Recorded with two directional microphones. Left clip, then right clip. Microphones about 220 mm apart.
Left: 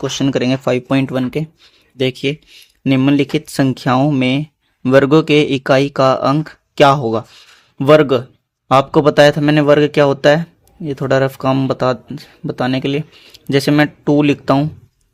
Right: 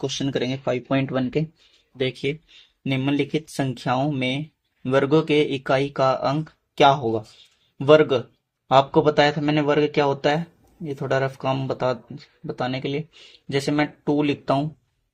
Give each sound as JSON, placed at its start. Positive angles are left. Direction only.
{"t": 0.0, "sound": "speech", "side_deg": 40}
{"t": 2.0, "sound": "speech", "side_deg": 40}